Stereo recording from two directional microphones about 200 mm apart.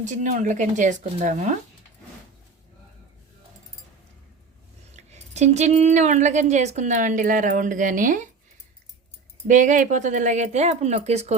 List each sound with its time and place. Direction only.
0.0 s speech: 40° right (ahead or behind)
4.9 s speech: 35° right (ahead or behind)
9.5 s speech: 40° right (ahead or behind)